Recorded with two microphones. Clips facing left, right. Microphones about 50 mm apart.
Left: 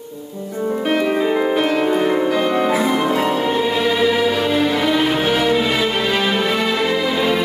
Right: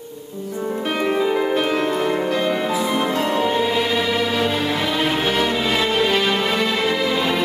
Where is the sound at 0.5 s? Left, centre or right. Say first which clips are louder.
Left 5 dB; centre.